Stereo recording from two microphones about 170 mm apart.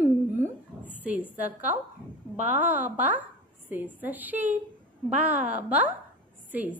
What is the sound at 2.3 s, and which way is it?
Speech, 45° right (ahead or behind).